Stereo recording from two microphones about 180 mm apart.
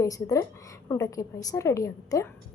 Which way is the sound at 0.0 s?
20° left (ahead or behind).